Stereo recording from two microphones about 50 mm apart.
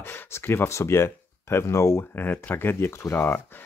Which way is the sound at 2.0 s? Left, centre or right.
Left.